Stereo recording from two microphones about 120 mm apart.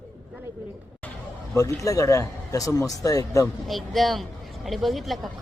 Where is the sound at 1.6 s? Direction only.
25° left (ahead or behind).